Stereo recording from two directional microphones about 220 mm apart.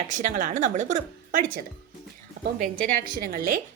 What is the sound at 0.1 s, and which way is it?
A woman's voice, 35° right (ahead or behind).